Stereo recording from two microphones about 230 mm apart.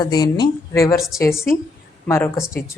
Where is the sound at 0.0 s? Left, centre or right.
Centre.